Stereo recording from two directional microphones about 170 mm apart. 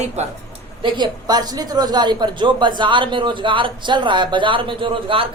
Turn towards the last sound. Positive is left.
turn(degrees=-30)  # may be behind; listen again after turning